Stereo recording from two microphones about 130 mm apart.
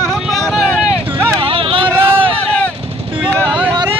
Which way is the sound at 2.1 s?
10° left (ahead or behind).